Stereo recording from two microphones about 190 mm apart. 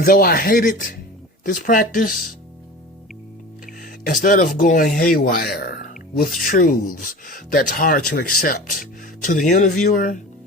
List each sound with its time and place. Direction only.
0.0 s speech: 50° left (ahead or behind)
4.0 s speech: 45° left (ahead or behind)